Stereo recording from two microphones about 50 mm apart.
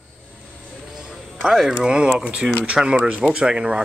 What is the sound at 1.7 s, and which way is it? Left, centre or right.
Speech, centre.